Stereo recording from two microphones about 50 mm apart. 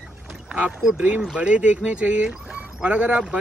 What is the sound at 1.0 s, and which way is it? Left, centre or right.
Speech, right.